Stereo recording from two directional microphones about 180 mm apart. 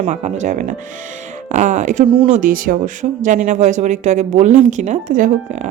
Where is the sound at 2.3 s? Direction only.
50° right (ahead or behind).